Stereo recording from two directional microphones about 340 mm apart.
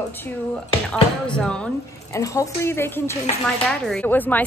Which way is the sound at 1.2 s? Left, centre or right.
Centre.